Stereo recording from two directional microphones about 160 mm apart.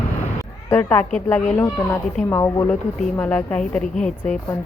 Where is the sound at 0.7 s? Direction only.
15° left (ahead or behind).